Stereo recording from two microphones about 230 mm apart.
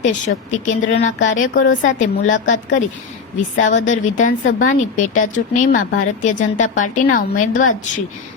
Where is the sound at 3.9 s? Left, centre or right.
Left.